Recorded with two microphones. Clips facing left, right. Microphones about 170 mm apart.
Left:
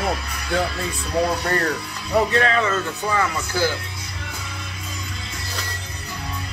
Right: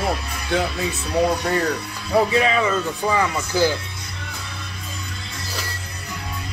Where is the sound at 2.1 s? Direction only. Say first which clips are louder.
Right 1 dB; 10° right (ahead or behind).